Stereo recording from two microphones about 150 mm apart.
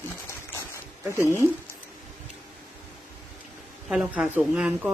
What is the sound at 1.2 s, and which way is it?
Speech, 20° left (ahead or behind).